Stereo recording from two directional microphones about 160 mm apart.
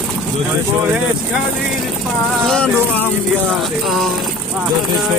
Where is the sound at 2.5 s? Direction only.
5° left (ahead or behind).